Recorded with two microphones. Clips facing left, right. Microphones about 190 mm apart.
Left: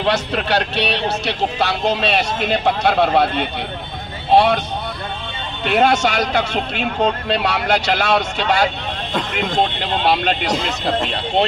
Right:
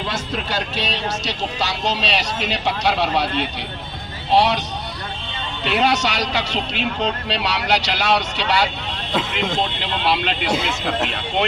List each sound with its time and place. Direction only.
0.0 s speech: 70° left (ahead or behind)
5.6 s speech: 50° left (ahead or behind)
9.8 s speech: 45° left (ahead or behind)